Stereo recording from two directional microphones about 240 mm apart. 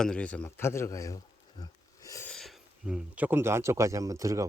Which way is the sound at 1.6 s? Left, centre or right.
Centre.